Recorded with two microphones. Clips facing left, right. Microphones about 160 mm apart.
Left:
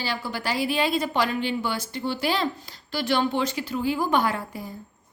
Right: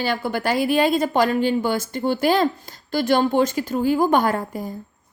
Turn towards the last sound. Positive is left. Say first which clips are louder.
# right 5 dB
turn(degrees=-45)  # may be behind; listen again after turning